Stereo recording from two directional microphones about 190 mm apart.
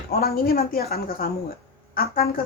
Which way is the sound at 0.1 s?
55° left (ahead or behind).